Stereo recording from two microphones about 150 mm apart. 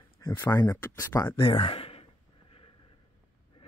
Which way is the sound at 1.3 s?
35° left (ahead or behind).